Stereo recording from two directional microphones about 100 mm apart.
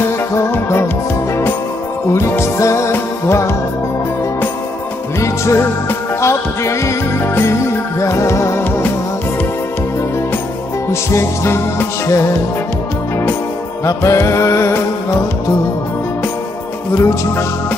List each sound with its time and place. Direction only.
0.4 s music: 25° left (ahead or behind)
2.1 s music: 25° left (ahead or behind)
5.2 s music: 30° left (ahead or behind)
10.9 s music: 25° left (ahead or behind)
13.8 s music: 30° left (ahead or behind)
16.9 s music: 30° left (ahead or behind)